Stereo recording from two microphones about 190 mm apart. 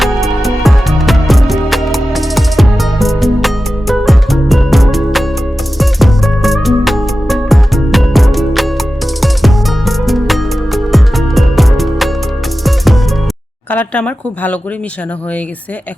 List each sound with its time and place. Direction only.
0.0 s music: centre (ahead or behind)
13.7 s speech: 5° left (ahead or behind)